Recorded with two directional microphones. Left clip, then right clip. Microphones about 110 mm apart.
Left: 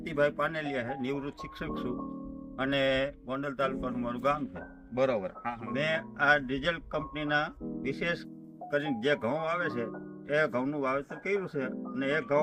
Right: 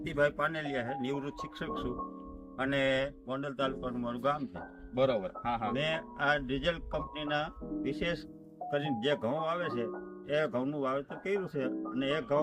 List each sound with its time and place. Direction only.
0.0 s a man's voice: 5° right (ahead or behind)
2.6 s speech: 10° right (ahead or behind)
3.6 s a man's voice: centre (ahead or behind)
5.7 s speech: 5° right (ahead or behind)